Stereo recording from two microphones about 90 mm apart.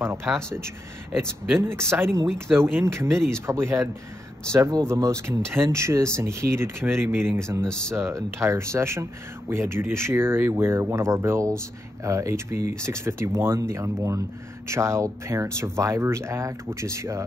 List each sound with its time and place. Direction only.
0.0 s speech: 25° right (ahead or behind)
1.6 s speech: 30° right (ahead or behind)
4.5 s speech: 40° right (ahead or behind)
7.6 s speech: 10° left (ahead or behind)
7.9 s speech: 30° right (ahead or behind)